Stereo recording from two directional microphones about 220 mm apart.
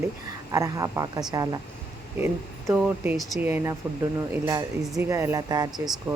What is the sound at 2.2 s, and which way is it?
Speech, 10° right (ahead or behind).